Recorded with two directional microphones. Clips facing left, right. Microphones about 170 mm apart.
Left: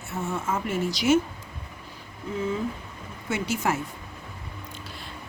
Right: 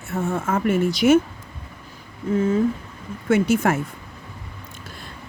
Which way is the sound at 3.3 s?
50° right (ahead or behind).